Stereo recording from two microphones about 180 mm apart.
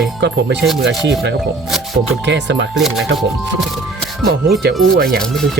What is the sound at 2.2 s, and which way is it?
Speech, 75° right (ahead or behind).